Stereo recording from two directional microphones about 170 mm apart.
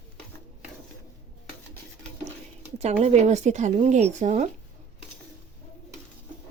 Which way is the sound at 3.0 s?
40° right (ahead or behind).